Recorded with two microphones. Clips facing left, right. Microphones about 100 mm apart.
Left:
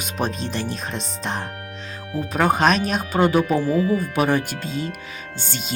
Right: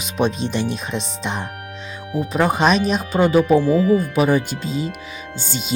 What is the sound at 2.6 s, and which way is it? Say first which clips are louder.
Speech: right 2 dB; centre (ahead or behind).